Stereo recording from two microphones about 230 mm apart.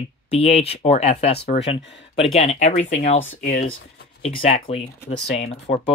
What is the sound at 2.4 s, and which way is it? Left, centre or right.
Speech, left.